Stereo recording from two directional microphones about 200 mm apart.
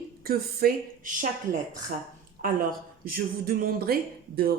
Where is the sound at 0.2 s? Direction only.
45° right (ahead or behind).